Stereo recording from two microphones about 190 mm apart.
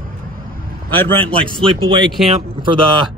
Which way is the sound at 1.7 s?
25° right (ahead or behind).